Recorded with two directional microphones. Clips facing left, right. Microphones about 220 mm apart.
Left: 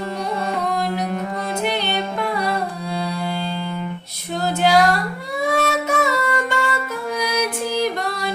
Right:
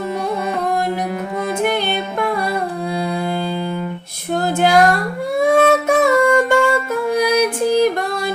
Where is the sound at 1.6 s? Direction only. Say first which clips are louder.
Right 2 dB; 50° right (ahead or behind).